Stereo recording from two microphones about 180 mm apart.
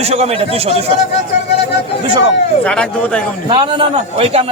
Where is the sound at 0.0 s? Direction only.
35° right (ahead or behind).